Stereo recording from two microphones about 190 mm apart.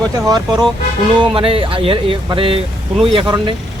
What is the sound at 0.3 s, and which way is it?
Speech, 20° right (ahead or behind).